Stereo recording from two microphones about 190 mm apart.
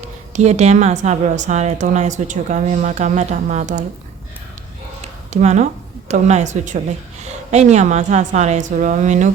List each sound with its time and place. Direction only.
0.3 s a woman's voice: 35° right (ahead or behind)
5.3 s a woman's voice: 35° right (ahead or behind)